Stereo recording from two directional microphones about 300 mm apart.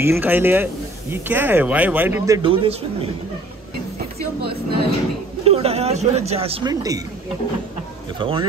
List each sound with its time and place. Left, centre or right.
0.0 s speech: centre
4.4 s train: right
5.4 s speech: centre
8.2 s speech: centre